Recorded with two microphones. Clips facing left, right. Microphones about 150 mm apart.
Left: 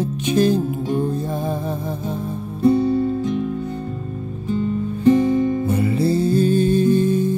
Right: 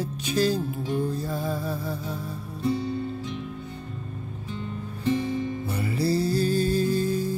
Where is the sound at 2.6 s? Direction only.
45° left (ahead or behind).